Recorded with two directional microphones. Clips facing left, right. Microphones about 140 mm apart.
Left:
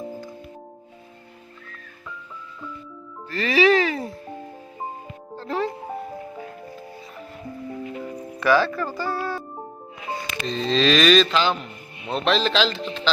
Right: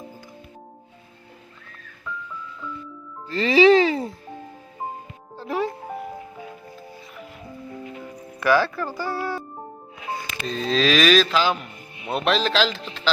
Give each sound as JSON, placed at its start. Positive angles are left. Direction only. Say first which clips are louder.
{"t": 3.2, "sound": "music", "louder": "right 3 dB", "side_deg": -25}
{"t": 5.4, "sound": "music", "louder": "even", "side_deg": -10}
{"t": 8.4, "sound": "speech", "louder": "even", "side_deg": -5}
{"t": 10.4, "sound": "a sound", "louder": "left 1 dB", "side_deg": -5}